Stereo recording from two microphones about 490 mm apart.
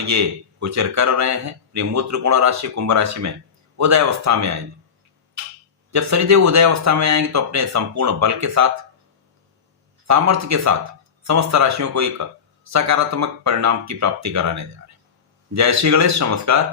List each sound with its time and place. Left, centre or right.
0.0 s speech: right
5.9 s speech: right
10.1 s speech: right